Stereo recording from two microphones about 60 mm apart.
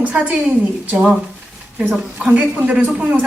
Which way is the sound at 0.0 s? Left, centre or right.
Right.